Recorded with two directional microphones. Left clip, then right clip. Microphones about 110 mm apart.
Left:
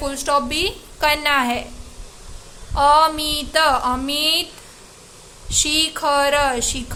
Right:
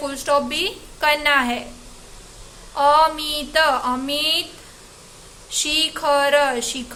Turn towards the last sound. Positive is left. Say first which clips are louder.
# left 1 dB
turn(degrees=35)  # may be behind; listen again after turning